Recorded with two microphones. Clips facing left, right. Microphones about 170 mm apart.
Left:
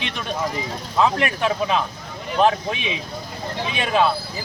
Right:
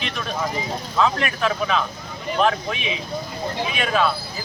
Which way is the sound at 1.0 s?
25° left (ahead or behind).